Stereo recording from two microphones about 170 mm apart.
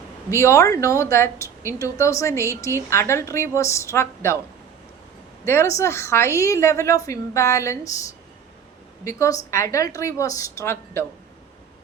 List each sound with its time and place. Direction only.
0.3 s a woman's voice: 15° left (ahead or behind)
5.5 s a woman's voice: 15° left (ahead or behind)
9.0 s a woman's voice: 15° left (ahead or behind)